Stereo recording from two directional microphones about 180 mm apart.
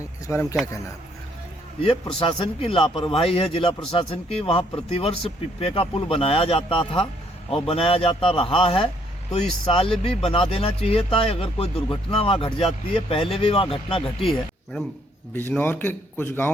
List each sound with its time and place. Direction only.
0.3 s a man's voice: 10° left (ahead or behind)
1.8 s speech: 30° left (ahead or behind)
14.3 s speech: centre (ahead or behind)
15.3 s a man's voice: 10° left (ahead or behind)